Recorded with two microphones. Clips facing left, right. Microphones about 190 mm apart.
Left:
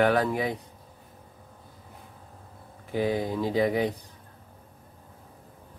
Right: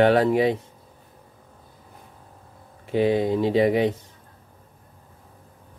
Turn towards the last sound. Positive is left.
turn(degrees=-25)  # may be behind; listen again after turning